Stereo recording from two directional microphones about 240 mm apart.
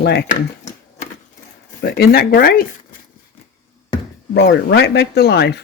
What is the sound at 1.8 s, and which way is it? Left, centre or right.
Speech, left.